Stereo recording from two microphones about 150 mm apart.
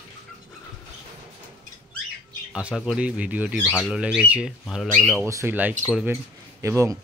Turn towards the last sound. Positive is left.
turn(degrees=-20)  # may be behind; listen again after turning